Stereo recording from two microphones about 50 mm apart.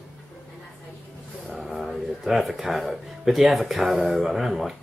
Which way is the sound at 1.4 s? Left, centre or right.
Centre.